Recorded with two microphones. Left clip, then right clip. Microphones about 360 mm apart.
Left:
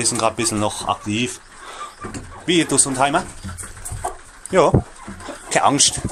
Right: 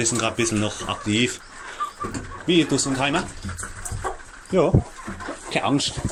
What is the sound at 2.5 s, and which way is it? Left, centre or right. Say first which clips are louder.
Speech: left 2 dB; centre.